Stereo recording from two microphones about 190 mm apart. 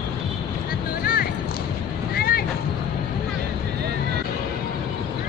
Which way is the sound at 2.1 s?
55° left (ahead or behind).